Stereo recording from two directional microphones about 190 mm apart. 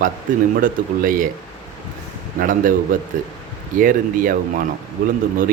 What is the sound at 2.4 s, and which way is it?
Speech, 45° right (ahead or behind).